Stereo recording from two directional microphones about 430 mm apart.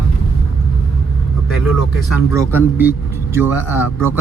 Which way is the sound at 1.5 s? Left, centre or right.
Centre.